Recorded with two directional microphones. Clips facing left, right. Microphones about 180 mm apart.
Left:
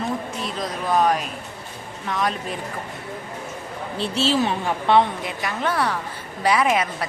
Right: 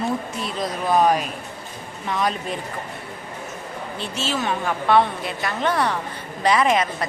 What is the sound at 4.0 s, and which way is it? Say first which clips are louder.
Speech: left 6 dB; 35° left (ahead or behind).